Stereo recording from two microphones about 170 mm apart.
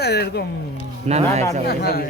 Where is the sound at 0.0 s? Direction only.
70° left (ahead or behind).